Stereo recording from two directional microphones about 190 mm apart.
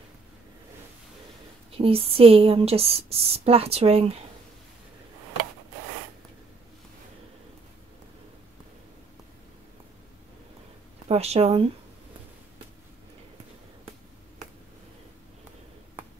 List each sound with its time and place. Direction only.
1.7 s speech: 30° right (ahead or behind)
11.1 s speech: 30° right (ahead or behind)